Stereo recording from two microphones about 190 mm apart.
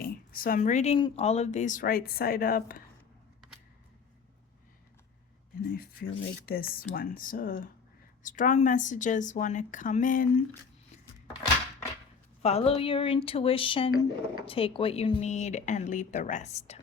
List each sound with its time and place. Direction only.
0.0 s a sound: 50° left (ahead or behind)
0.9 s a woman's voice: 30° left (ahead or behind); by 2.8 s 50° left (ahead or behind)
5.6 s a woman's voice: 50° left (ahead or behind)
12.4 s speech: 35° left (ahead or behind)